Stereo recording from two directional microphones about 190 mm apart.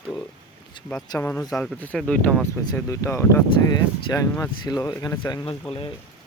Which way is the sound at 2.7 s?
15° left (ahead or behind).